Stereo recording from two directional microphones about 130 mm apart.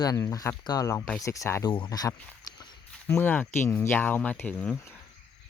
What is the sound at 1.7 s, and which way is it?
Speech, 35° left (ahead or behind).